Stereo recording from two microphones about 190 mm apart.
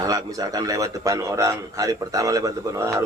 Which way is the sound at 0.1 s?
20° right (ahead or behind).